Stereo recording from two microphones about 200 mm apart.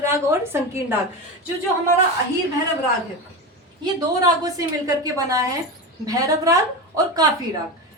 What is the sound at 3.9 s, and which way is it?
A woman's voice, 20° right (ahead or behind).